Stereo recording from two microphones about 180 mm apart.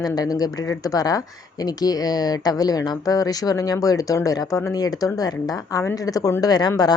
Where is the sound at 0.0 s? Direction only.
20° left (ahead or behind).